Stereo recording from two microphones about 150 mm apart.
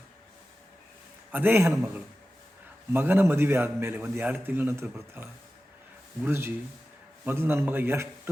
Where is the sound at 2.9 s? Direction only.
15° right (ahead or behind).